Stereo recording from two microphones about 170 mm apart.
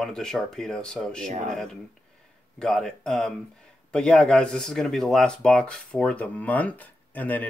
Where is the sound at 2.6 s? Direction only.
5° left (ahead or behind).